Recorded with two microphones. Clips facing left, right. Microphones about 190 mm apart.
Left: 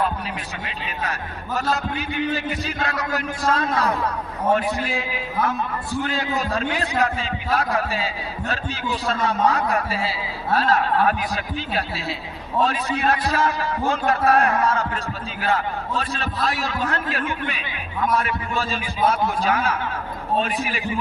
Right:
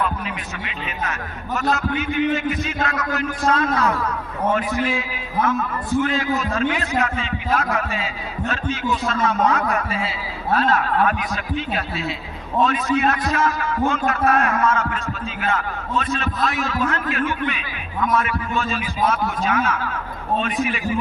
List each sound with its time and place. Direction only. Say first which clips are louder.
1.7 s a man's voice: right 3 dB; 35° left (ahead or behind)